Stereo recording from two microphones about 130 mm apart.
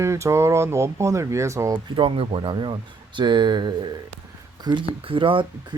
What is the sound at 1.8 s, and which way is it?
Speech, 40° right (ahead or behind).